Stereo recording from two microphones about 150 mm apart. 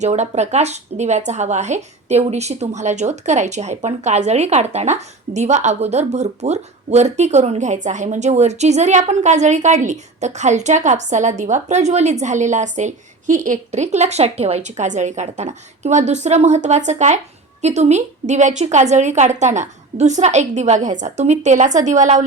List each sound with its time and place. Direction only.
0.0 s a woman's voice: 50° right (ahead or behind)